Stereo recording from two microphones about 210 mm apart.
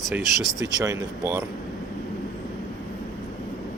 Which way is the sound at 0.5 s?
15° right (ahead or behind).